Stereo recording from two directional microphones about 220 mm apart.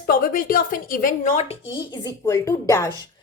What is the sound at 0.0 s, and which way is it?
Speech, 40° left (ahead or behind).